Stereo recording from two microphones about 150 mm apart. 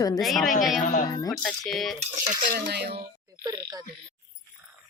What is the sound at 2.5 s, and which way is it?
Speech, 90° right.